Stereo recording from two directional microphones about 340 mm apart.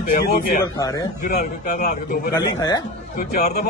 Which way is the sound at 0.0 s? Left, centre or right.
Left.